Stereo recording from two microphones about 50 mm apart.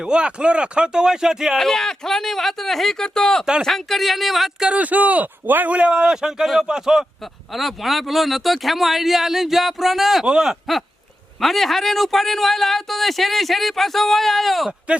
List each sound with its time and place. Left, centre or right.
0.0 s speech: centre
1.5 s speech: centre
4.8 s speech: right
5.7 s speech: right
7.5 s speech: centre